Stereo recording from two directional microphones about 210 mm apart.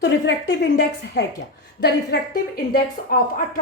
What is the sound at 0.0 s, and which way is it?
A woman's voice, 60° left (ahead or behind).